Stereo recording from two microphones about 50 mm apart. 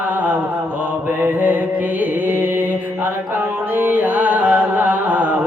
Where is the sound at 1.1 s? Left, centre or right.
Right.